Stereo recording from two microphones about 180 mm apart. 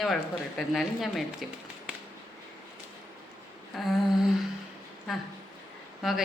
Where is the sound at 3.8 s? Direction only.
Centre (ahead or behind).